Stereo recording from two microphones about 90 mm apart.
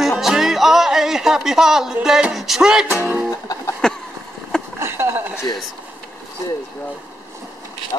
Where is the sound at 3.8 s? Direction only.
10° left (ahead or behind).